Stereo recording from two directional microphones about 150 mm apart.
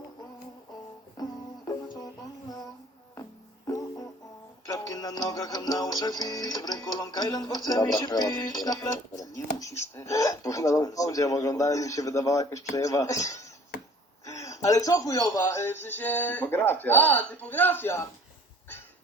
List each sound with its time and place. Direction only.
1.1 s music: 25° left (ahead or behind)
2.5 s child singing: 25° left (ahead or behind)
3.7 s music: 25° left (ahead or behind)
14.3 s speech: 20° left (ahead or behind)